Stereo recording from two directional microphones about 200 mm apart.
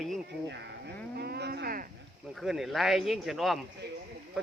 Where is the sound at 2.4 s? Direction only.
Centre (ahead or behind).